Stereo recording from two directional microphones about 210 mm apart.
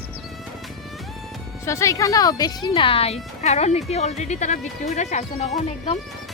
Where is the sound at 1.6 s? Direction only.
15° left (ahead or behind).